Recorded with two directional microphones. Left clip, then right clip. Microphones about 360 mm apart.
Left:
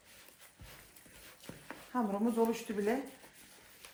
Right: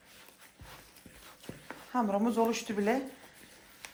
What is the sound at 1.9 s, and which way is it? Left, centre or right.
Speech, centre.